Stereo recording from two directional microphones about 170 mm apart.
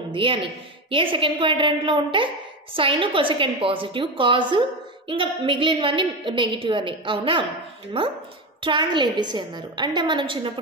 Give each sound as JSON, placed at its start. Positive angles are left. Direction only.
{"t": 0.1, "sound": "a woman's voice", "side_deg": -30}